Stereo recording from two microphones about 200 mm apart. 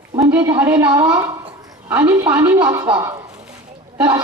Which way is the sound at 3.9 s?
10° right (ahead or behind).